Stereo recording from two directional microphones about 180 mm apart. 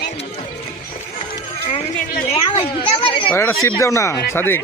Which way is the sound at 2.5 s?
30° left (ahead or behind).